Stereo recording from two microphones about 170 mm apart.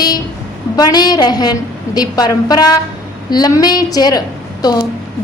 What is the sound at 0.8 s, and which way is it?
Speech, 25° left (ahead or behind).